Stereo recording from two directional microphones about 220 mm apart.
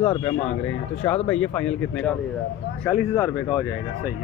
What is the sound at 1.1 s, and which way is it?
Speech, 5° left (ahead or behind).